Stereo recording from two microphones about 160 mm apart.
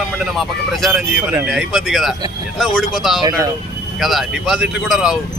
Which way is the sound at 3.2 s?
20° right (ahead or behind).